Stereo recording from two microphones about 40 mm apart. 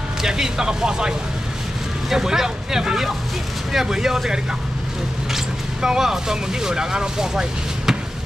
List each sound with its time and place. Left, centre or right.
0.2 s speech: centre